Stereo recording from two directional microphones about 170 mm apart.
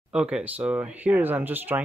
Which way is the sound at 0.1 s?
5° right (ahead or behind).